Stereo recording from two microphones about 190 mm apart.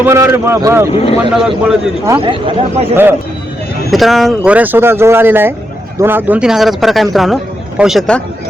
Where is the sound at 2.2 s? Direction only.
30° right (ahead or behind).